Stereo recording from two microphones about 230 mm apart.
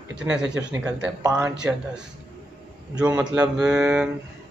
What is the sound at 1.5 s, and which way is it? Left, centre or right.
Speech, centre.